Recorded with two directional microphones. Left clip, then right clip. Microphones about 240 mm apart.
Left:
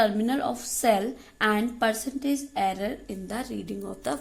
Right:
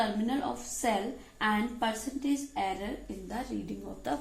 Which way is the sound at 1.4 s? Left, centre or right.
Left.